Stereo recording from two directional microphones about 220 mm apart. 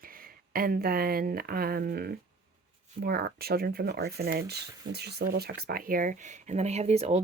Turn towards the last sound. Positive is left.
turn(degrees=-30)  # may be behind; listen again after turning